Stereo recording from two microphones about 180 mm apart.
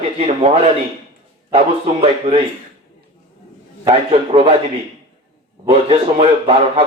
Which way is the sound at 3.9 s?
30° right (ahead or behind).